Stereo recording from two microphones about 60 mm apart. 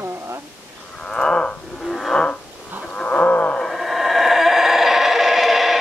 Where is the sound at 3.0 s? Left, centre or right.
Left.